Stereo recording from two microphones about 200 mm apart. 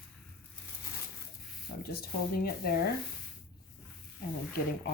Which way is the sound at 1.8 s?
50° left (ahead or behind).